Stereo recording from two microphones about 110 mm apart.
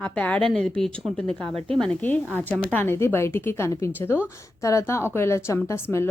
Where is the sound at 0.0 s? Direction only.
10° left (ahead or behind).